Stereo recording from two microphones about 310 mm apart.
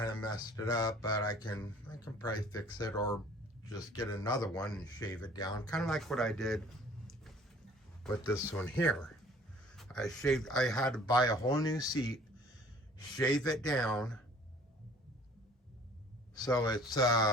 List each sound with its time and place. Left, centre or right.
0.0 s speech: centre
8.0 s speech: centre
13.1 s speech: centre
16.4 s speech: centre